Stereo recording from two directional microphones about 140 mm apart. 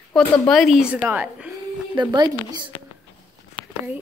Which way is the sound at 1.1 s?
10° right (ahead or behind).